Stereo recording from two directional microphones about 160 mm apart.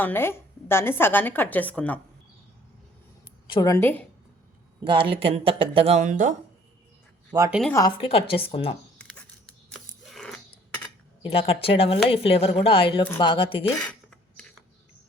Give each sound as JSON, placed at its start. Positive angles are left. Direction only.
{"t": 0.0, "sound": "a woman's voice", "side_deg": 15}
{"t": 3.4, "sound": "a woman's voice", "side_deg": 30}
{"t": 3.8, "sound": "a woman's voice", "side_deg": 10}
{"t": 4.8, "sound": "speech", "side_deg": -30}
{"t": 7.3, "sound": "speech", "side_deg": -25}
{"t": 7.7, "sound": "speech", "side_deg": 20}
{"t": 7.9, "sound": "speech", "side_deg": 35}
{"t": 9.0, "sound": "a sound", "side_deg": 5}
{"t": 11.2, "sound": "speech", "side_deg": 35}
{"t": 13.7, "sound": "a sound", "side_deg": 5}